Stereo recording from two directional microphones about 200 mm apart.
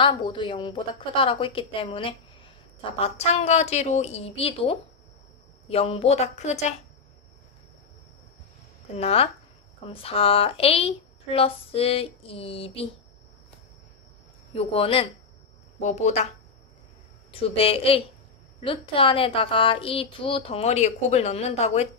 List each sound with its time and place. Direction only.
0.0 s a woman's voice: 25° left (ahead or behind)
8.9 s a woman's voice: 30° left (ahead or behind)
14.5 s a woman's voice: 30° left (ahead or behind)
17.3 s a woman's voice: 30° left (ahead or behind)